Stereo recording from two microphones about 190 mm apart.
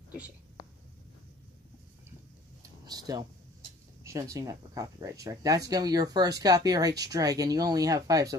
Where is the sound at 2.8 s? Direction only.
20° right (ahead or behind).